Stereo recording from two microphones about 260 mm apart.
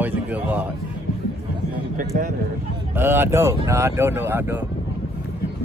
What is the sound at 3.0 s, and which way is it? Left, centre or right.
Speech, centre.